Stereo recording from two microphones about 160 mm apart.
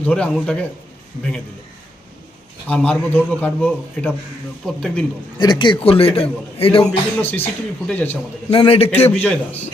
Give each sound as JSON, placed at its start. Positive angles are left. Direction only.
{"t": 0.0, "sound": "a man's voice", "side_deg": 5}
{"t": 2.6, "sound": "a man's voice", "side_deg": 10}
{"t": 5.4, "sound": "a man's voice", "side_deg": 30}
{"t": 6.8, "sound": "a man's voice", "side_deg": 10}
{"t": 8.4, "sound": "a man's voice", "side_deg": 35}
{"t": 9.1, "sound": "a man's voice", "side_deg": 10}